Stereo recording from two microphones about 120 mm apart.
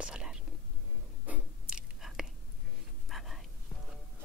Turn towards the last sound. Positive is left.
turn(degrees=0)  # may be behind; listen again after turning